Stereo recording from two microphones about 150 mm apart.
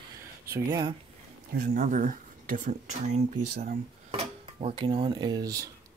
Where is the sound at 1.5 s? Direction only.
65° right (ahead or behind).